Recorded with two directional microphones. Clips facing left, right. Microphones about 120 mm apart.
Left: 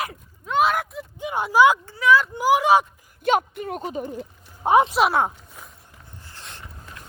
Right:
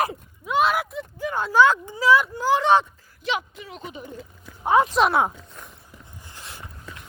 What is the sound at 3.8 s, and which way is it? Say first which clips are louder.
Speech: left 5 dB; 40° left (ahead or behind).